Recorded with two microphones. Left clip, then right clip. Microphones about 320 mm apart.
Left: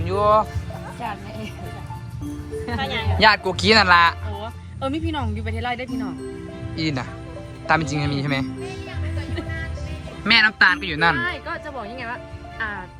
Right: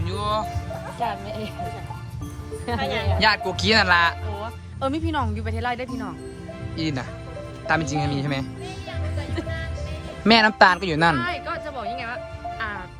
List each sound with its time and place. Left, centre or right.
0.0 s music: centre
2.7 s speech: centre
10.2 s speech: centre
11.2 s speech: centre